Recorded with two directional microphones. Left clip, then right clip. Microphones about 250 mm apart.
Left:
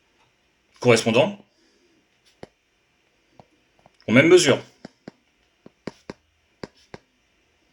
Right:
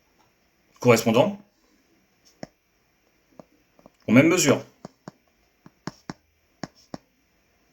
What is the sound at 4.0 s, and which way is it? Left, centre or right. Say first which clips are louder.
Speech: left 4 dB; left.